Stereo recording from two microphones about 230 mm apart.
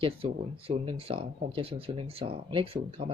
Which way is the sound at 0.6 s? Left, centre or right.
Right.